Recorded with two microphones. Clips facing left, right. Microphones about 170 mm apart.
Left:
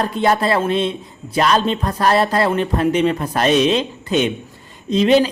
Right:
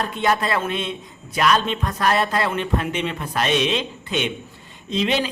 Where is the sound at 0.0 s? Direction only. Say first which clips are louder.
Left 5 dB; 35° left (ahead or behind).